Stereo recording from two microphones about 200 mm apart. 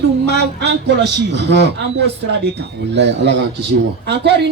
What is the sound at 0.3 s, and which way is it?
Speech, 55° right (ahead or behind).